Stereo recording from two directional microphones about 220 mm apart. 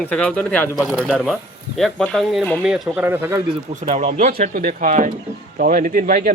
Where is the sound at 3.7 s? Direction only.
35° right (ahead or behind).